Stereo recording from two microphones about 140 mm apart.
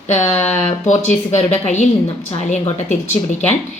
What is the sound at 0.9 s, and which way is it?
A woman's voice, 55° left (ahead or behind).